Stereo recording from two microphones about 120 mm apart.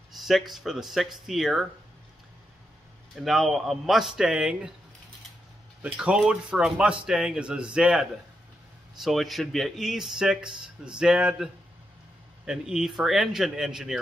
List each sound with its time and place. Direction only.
0.2 s speech: centre (ahead or behind)
3.2 s speech: centre (ahead or behind)
5.8 s speech: 10° right (ahead or behind)